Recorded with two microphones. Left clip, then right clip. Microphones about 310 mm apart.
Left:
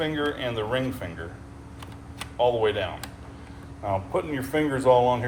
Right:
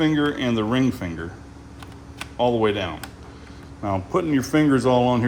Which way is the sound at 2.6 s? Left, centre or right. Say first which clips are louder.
Right 3 dB; right.